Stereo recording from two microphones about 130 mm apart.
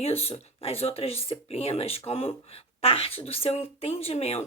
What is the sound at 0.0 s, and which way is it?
Speech, 50° left (ahead or behind).